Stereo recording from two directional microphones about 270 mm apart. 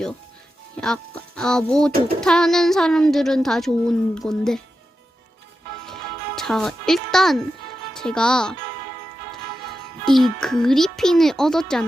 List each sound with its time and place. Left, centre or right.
0.8 s a woman's voice: centre
5.8 s music: centre
7.9 s a woman's voice: centre
10.1 s a woman's voice: centre